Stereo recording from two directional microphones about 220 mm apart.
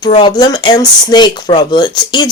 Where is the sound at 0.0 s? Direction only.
20° left (ahead or behind).